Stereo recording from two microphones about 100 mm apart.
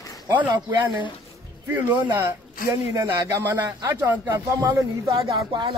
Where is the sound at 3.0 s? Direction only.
30° right (ahead or behind).